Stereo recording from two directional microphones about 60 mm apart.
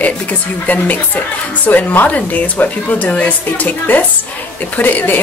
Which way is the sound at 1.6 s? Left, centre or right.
Left.